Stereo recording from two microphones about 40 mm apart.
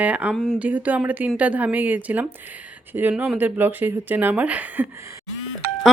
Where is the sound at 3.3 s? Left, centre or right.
Right.